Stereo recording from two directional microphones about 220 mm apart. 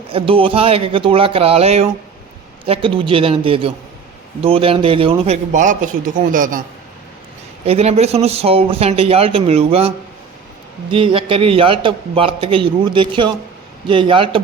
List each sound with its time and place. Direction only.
0.1 s a man's voice: 25° right (ahead or behind)
7.6 s a man's voice: 25° right (ahead or behind)